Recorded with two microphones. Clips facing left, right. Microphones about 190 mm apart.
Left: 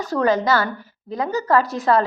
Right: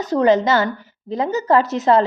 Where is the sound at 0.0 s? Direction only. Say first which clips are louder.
Right 4 dB; 20° right (ahead or behind).